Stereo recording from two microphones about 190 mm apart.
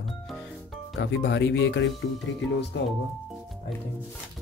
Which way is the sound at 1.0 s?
70° left (ahead or behind).